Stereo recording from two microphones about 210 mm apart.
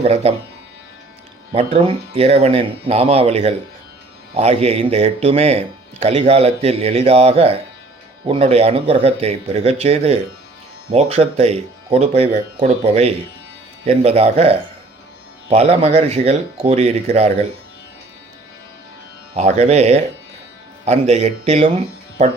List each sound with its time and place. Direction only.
0.0 s speech: 30° right (ahead or behind)
1.5 s speech: 25° right (ahead or behind)
19.4 s speech: 35° right (ahead or behind)